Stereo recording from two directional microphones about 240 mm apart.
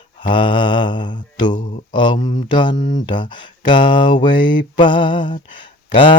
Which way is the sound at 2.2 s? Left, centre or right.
Centre.